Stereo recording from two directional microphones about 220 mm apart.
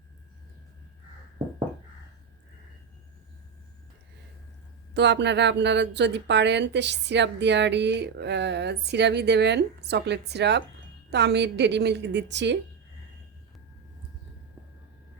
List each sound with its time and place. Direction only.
4.9 s speech: 50° right (ahead or behind)